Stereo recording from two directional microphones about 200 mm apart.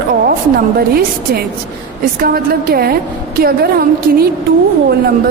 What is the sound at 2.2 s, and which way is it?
A woman's voice, 50° right (ahead or behind).